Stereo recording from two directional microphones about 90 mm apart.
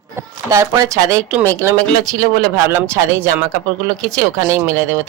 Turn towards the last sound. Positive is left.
turn(degrees=-35)  # may be behind; listen again after turning